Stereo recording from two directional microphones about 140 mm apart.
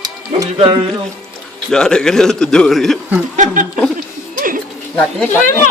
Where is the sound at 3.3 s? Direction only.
60° right (ahead or behind).